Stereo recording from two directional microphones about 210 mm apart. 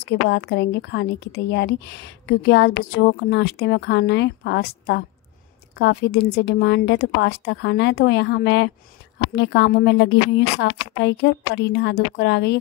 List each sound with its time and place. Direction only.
0.0 s a woman's voice: 55° left (ahead or behind)